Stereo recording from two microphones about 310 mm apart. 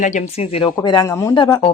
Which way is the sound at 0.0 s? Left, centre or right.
Left.